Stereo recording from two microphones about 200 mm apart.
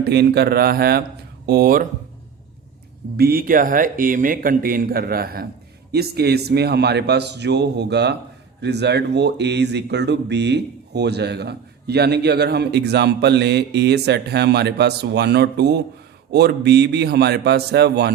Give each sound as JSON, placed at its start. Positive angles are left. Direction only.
{"t": 0.0, "sound": "speech", "side_deg": -55}
{"t": 3.2, "sound": "speech", "side_deg": -45}